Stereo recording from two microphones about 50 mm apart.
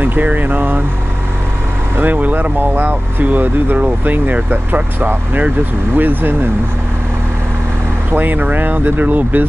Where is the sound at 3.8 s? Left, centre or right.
Right.